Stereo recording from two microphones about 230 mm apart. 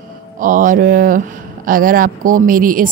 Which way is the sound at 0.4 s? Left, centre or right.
Right.